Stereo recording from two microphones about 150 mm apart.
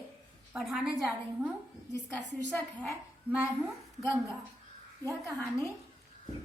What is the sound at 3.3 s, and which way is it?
Speech, 10° right (ahead or behind).